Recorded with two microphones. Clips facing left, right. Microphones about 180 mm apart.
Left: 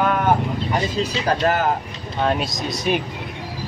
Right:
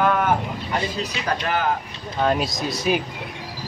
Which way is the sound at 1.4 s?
40° left (ahead or behind).